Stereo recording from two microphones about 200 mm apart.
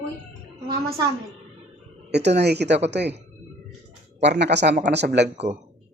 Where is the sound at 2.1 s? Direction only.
60° right (ahead or behind).